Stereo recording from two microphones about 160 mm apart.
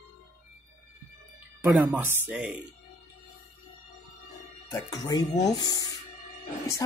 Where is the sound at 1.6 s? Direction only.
10° right (ahead or behind).